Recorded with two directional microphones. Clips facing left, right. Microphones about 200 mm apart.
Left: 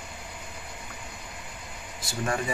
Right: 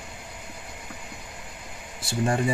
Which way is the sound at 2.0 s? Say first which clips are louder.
Right 4 dB; 30° right (ahead or behind).